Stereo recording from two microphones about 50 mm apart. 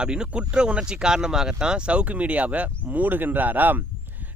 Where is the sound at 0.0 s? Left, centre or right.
Centre.